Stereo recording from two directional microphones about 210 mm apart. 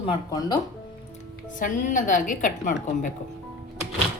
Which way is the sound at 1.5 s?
40° left (ahead or behind).